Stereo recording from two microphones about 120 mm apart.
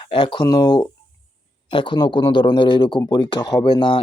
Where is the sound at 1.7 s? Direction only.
45° left (ahead or behind).